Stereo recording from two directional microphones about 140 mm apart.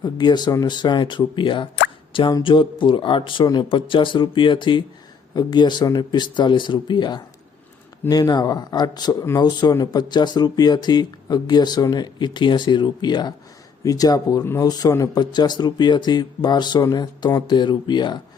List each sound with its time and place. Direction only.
0.0 s speech: 30° left (ahead or behind)